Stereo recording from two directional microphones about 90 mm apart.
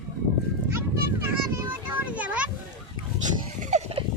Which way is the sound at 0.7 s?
30° right (ahead or behind).